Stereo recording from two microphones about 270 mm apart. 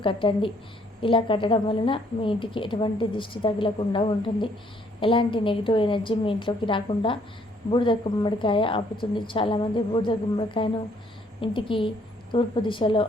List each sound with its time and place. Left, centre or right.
0.0 s a woman's voice: centre